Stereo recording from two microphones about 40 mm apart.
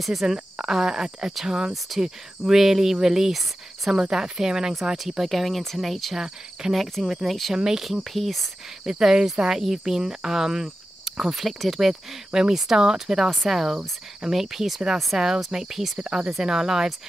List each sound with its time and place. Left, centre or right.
0.0 s speech: centre
4.0 s speech: centre
5.2 s speech: centre
6.1 s speech: centre
6.7 s speech: centre
7.5 s speech: centre
7.8 s speech: centre
8.8 s speech: centre
12.3 s speech: centre